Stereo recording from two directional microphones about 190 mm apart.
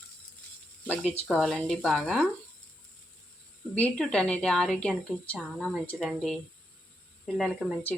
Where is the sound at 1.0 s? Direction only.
35° left (ahead or behind).